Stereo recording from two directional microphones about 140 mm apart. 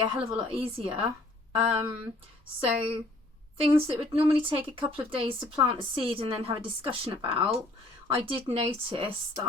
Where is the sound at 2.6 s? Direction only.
40° right (ahead or behind).